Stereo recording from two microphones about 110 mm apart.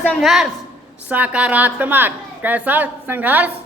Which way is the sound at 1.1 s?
15° right (ahead or behind).